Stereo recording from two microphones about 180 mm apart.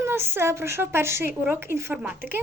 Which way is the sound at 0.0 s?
10° right (ahead or behind).